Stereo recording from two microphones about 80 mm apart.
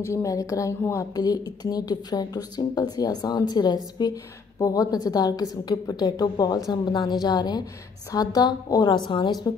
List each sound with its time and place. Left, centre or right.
0.0 s speech: left
1.1 s a woman's voice: left